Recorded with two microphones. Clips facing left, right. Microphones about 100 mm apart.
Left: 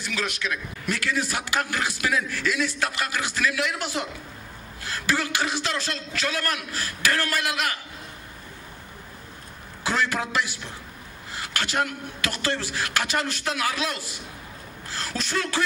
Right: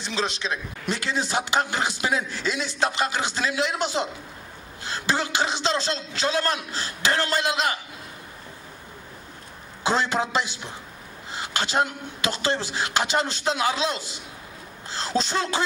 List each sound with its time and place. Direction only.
0.0 s a man's voice: 25° right (ahead or behind)
9.8 s a man's voice: 25° right (ahead or behind)